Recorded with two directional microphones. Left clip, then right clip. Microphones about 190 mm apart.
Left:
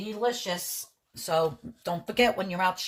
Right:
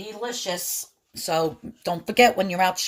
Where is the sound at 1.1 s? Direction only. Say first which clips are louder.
Right 2 dB; 45° right (ahead or behind).